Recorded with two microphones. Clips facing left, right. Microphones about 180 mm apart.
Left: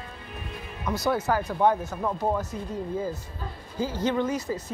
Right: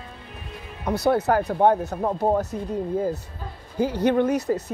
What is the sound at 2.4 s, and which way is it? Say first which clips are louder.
Speech: right 5 dB; 60° right (ahead or behind).